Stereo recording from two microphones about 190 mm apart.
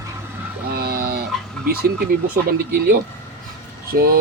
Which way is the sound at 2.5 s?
50° right (ahead or behind).